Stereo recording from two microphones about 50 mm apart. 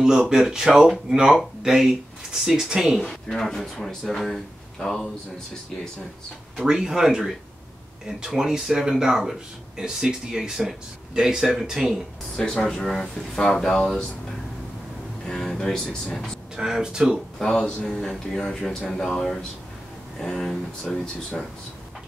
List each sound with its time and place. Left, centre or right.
0.0 s speech: centre
3.1 s a man's voice: centre
6.7 s speech: centre
8.3 s speech: centre
12.4 s speech: centre
15.2 s speech: centre
16.5 s speech: centre
17.4 s speech: centre